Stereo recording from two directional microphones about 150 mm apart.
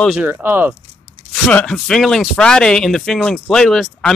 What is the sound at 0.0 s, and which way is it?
Speech, 5° right (ahead or behind).